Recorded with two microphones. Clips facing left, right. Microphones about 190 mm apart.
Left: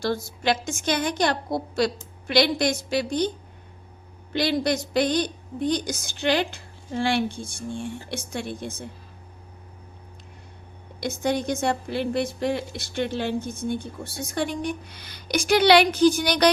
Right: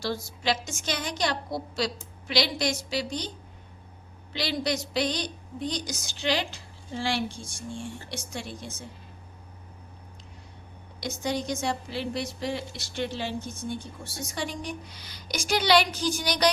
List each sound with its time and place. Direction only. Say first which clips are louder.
0.0 s a woman's voice: left 5 dB; 55° left (ahead or behind)
11.0 s a woman's voice: left 5 dB; 55° left (ahead or behind)